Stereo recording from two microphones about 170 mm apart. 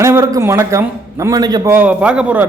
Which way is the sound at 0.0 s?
15° right (ahead or behind).